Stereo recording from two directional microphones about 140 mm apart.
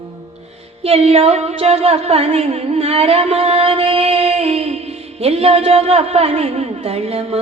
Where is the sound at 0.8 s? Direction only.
45° right (ahead or behind).